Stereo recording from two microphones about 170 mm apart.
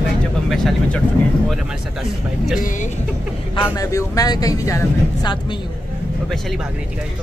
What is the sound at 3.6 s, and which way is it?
Speech, 20° left (ahead or behind).